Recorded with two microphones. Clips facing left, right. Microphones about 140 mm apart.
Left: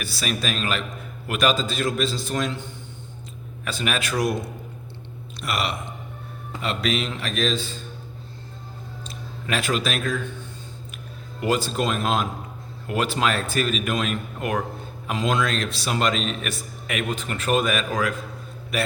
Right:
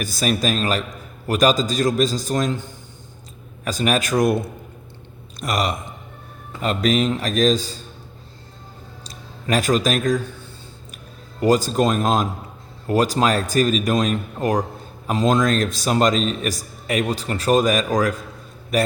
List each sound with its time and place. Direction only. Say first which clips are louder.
0.0 s a man's voice: right 6 dB; 45° right (ahead or behind)
3.6 s a man's voice: right 6 dB; 40° right (ahead or behind)
9.0 s speech: right 5 dB; 40° right (ahead or behind)
11.3 s a man's voice: right 6 dB; 40° right (ahead or behind)